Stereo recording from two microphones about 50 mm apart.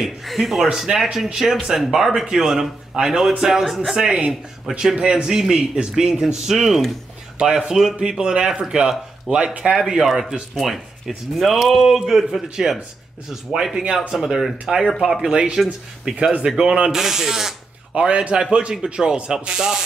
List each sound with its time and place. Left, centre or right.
0.0 s a man's voice: centre
7.3 s a man's voice: centre
16.1 s speech: centre
16.9 s a man's voice: centre
17.9 s a man's voice: right